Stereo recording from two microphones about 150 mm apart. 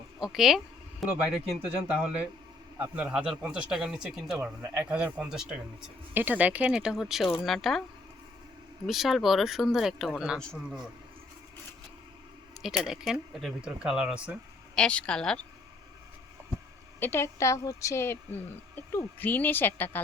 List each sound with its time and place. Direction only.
0.2 s speech: centre (ahead or behind)
8.9 s speech: centre (ahead or behind)
12.6 s speech: 5° right (ahead or behind)
14.8 s a woman's voice: 5° left (ahead or behind)
17.0 s a woman's voice: 15° left (ahead or behind)